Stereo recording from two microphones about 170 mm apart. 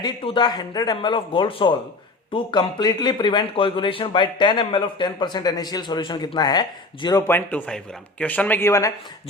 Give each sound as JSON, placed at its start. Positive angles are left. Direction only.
{"t": 0.0, "sound": "speech", "side_deg": 25}